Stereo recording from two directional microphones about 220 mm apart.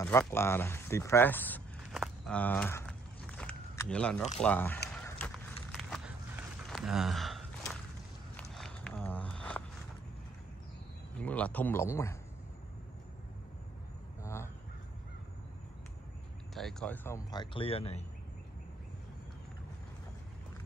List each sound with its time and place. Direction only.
0.0 s vehicle: 10° left (ahead or behind)
4.4 s speech: 5° left (ahead or behind)
4.9 s run: 10° left (ahead or behind)
5.7 s a sound: centre (ahead or behind)
8.4 s walk: 5° left (ahead or behind)
11.1 s speech: 5° left (ahead or behind)
14.2 s crow: 10° left (ahead or behind)
16.5 s speech: 5° left (ahead or behind); by 18.0 s 25° left (ahead or behind)